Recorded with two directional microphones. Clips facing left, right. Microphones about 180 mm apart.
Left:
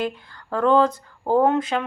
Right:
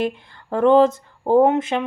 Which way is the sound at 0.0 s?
25° right (ahead or behind).